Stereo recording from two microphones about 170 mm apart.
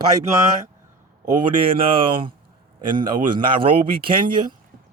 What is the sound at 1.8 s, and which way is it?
A man's voice, 30° right (ahead or behind).